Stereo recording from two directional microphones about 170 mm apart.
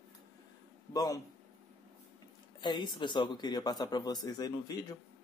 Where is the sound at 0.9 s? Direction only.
20° left (ahead or behind).